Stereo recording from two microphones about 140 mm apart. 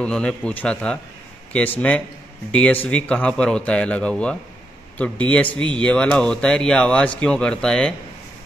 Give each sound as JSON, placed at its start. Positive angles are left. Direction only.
{"t": 0.0, "sound": "speech", "side_deg": 5}